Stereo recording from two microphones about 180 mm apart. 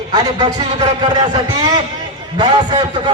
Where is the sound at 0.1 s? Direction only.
20° right (ahead or behind).